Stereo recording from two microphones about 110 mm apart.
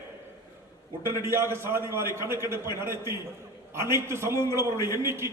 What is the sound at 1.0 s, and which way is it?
A man's voice, 25° right (ahead or behind).